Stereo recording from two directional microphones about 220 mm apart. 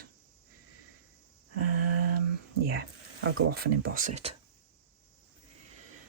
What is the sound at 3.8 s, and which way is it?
Speech, 40° right (ahead or behind).